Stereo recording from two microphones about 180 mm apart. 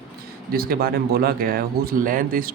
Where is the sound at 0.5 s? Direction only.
55° right (ahead or behind).